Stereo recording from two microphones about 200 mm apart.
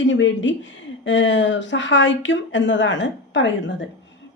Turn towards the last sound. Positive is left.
turn(degrees=65)  # may be behind; listen again after turning